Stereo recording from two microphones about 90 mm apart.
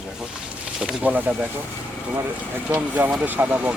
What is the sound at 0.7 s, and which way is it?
Speech, 15° right (ahead or behind).